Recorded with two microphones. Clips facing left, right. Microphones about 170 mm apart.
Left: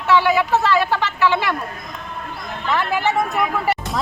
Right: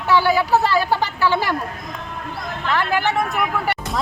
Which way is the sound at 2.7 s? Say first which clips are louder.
Even; centre (ahead or behind).